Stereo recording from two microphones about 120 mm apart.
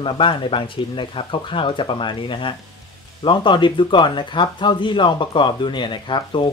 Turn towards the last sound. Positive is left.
turn(degrees=45)  # may be behind; listen again after turning